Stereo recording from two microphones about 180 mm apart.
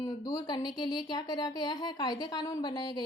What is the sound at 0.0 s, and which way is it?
Speech, 20° left (ahead or behind).